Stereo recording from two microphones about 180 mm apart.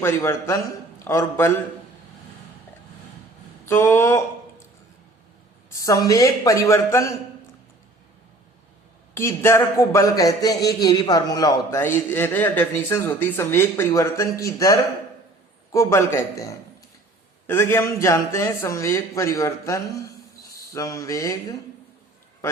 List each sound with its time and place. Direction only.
0.0 s speech: 15° left (ahead or behind)
3.7 s speech: 15° left (ahead or behind)
5.8 s speech: 20° left (ahead or behind)
9.1 s speech: 15° left (ahead or behind)
20.7 s a sound: 20° left (ahead or behind)